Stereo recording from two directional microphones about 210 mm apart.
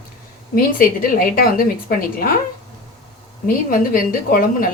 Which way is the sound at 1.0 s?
40° left (ahead or behind).